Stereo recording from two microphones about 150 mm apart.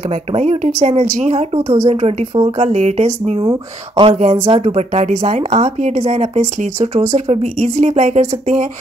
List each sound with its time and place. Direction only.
0.3 s speech: 50° right (ahead or behind)
2.7 s speech: 50° right (ahead or behind)
3.3 s speech: 30° right (ahead or behind)
4.1 s speech: 50° right (ahead or behind)